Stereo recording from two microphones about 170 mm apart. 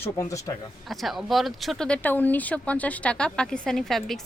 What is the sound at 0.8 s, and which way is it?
Speech, centre (ahead or behind).